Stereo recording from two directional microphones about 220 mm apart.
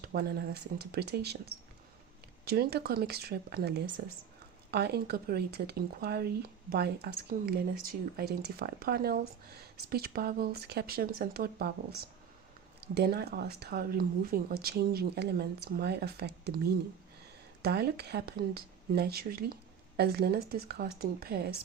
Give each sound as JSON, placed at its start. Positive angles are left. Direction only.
{"t": 0.0, "sound": "speech", "side_deg": -45}
{"t": 12.8, "sound": "speech", "side_deg": -45}
{"t": 17.6, "sound": "speech", "side_deg": -45}